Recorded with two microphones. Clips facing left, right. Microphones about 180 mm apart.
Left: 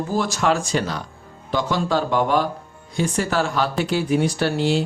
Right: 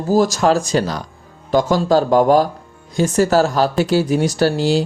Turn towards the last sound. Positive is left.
turn(degrees=-35)  # may be behind; listen again after turning